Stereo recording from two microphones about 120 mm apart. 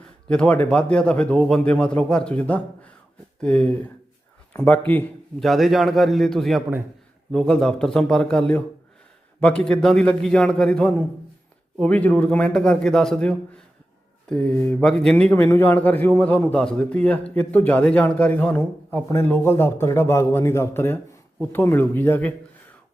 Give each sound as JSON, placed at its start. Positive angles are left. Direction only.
{"t": 0.0, "sound": "a man's voice", "side_deg": 10}
{"t": 5.4, "sound": "a man's voice", "side_deg": 0}
{"t": 19.0, "sound": "a man's voice", "side_deg": 20}